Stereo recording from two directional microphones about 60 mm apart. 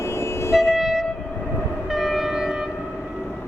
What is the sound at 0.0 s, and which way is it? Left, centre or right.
Vehicle, left.